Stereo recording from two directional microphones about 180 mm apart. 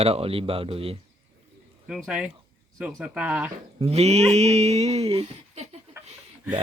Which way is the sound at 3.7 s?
35° right (ahead or behind).